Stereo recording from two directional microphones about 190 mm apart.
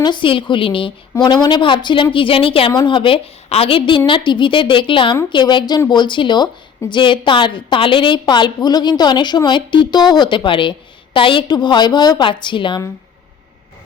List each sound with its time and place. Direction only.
0.0 s a woman's voice: 25° left (ahead or behind)